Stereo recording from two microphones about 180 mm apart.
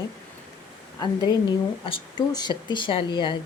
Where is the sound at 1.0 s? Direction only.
25° left (ahead or behind).